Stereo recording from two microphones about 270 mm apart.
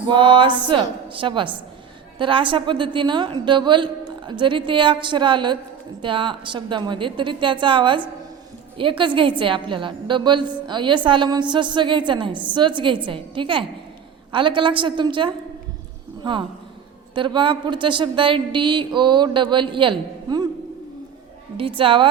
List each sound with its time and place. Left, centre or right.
0.1 s a woman's voice: centre
17.2 s a woman's voice: centre
21.6 s a woman's voice: centre